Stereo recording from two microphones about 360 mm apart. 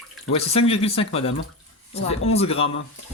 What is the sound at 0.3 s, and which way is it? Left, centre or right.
A woman's voice, centre.